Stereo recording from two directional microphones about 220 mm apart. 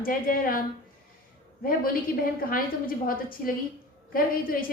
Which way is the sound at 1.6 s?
40° left (ahead or behind).